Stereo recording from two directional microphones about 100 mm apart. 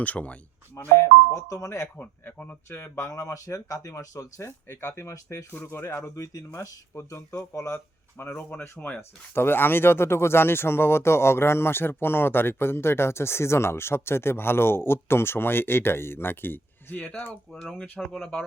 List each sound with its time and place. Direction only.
0.0 s speech: 15° left (ahead or behind)
1.3 s speech: 30° left (ahead or behind); by 18.4 s 5° left (ahead or behind)